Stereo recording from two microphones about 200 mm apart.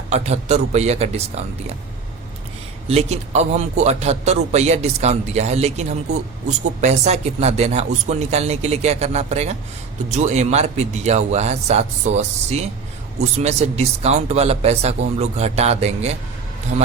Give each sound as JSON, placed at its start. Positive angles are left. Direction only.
{"t": 0.1, "sound": "a man's voice", "side_deg": -35}
{"t": 2.8, "sound": "a man's voice", "side_deg": -30}